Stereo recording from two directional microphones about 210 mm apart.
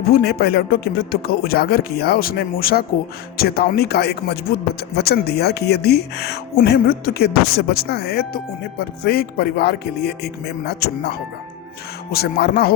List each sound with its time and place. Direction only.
0.1 s speech: 45° left (ahead or behind)
12.1 s speech: 50° left (ahead or behind)